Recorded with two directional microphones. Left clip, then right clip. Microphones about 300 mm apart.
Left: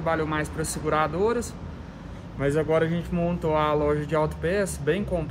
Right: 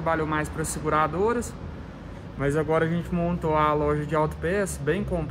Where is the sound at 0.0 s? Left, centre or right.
Centre.